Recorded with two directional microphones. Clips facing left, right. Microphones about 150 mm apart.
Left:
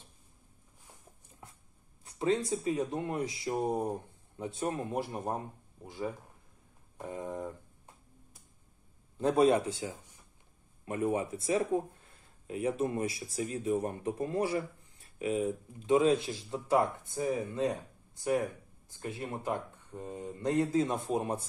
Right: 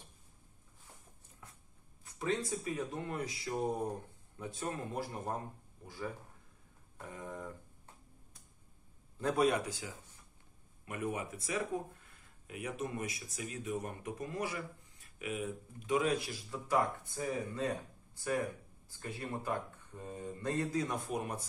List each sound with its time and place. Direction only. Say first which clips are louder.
2.0 s speech: left 6 dB; 25° left (ahead or behind)
7.0 s a sound: left 7 dB; 25° left (ahead or behind)
9.2 s speech: left 6 dB; 25° left (ahead or behind)
18.9 s speech: left 3 dB; 20° left (ahead or behind)